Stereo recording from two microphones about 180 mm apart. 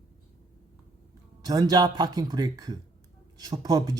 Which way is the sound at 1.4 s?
20° right (ahead or behind).